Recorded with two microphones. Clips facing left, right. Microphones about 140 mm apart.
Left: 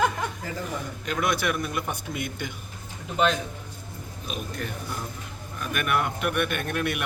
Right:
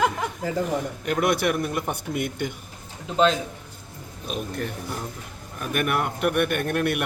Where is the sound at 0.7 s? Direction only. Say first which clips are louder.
Right 6 dB; 55° right (ahead or behind).